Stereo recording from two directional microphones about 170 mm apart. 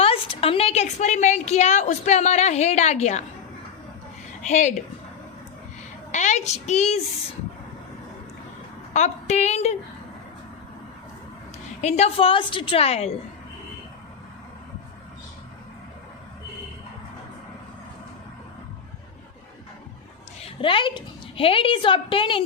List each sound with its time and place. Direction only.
0.0 s a woman's voice: 35° left (ahead or behind)
4.4 s speech: 45° left (ahead or behind)
6.1 s a woman's voice: 45° left (ahead or behind)
8.9 s a woman's voice: 45° left (ahead or behind)
11.8 s a woman's voice: 40° left (ahead or behind)
20.4 s a woman's voice: 30° left (ahead or behind)